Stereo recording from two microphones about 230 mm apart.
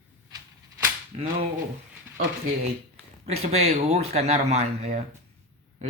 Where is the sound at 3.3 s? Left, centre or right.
Right.